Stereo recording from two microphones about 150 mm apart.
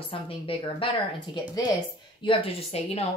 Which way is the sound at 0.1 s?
35° left (ahead or behind).